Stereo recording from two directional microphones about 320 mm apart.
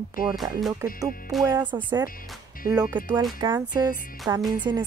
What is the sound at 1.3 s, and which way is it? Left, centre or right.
Speech, centre.